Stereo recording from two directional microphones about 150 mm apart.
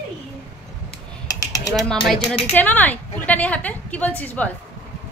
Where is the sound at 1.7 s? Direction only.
5° left (ahead or behind).